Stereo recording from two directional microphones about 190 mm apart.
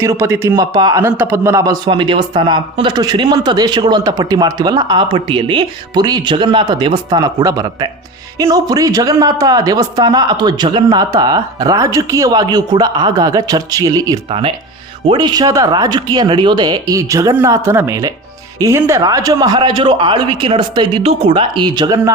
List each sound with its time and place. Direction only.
0.0 s a man's voice: 15° right (ahead or behind)
14.3 s a man's voice: 30° right (ahead or behind)